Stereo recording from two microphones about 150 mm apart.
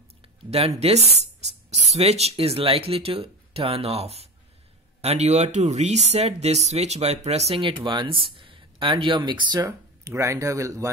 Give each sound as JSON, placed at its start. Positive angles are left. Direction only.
{"t": 0.2, "sound": "speech", "side_deg": -45}
{"t": 9.6, "sound": "speech", "side_deg": -20}